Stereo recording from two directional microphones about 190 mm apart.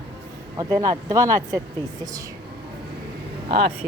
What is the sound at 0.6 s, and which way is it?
Speech, 20° right (ahead or behind).